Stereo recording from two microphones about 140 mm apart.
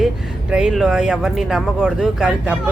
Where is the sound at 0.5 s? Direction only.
5° right (ahead or behind).